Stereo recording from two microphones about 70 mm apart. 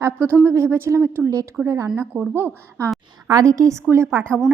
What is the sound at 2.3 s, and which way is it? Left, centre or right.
Speech, right.